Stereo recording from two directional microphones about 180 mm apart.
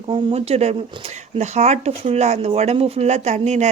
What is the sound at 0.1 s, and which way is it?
Speech, 30° right (ahead or behind).